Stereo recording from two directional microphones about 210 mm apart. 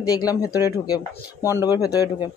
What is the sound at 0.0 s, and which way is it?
Speech, 15° left (ahead or behind).